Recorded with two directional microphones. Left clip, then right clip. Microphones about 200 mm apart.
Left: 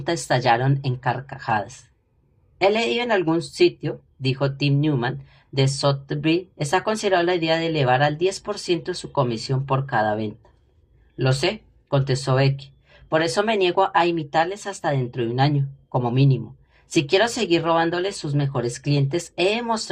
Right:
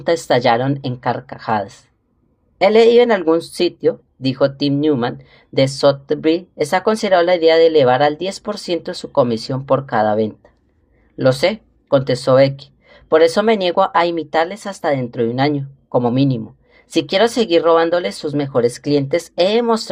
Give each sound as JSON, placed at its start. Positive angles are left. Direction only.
{"t": 0.3, "sound": "speech", "side_deg": -45}